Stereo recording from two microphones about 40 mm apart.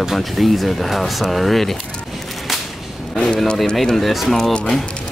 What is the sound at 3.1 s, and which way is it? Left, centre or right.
Speech, left.